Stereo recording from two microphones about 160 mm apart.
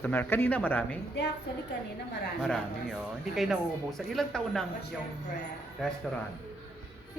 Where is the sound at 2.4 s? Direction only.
5° left (ahead or behind).